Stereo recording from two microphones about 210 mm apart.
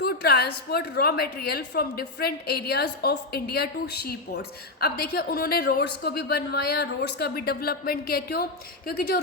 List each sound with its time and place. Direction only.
0.0 s a woman's voice: 50° left (ahead or behind)